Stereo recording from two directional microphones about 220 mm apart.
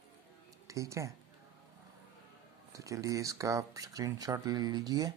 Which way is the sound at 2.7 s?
15° right (ahead or behind).